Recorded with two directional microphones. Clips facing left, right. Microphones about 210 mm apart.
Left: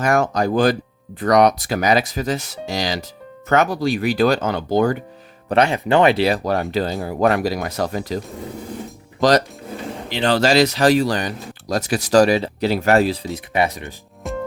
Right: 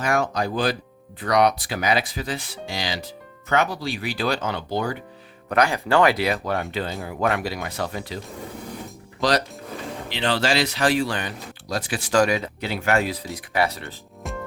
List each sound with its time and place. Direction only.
0.0 s speech: 45° left (ahead or behind)
5.5 s speech: 25° left (ahead or behind); by 8.2 s 40° left (ahead or behind)
10.1 s speech: 40° left (ahead or behind)
13.3 s speech: 20° left (ahead or behind)
14.2 s music: centre (ahead or behind)